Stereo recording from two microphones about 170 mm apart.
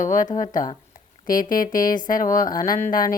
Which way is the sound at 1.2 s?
55° left (ahead or behind).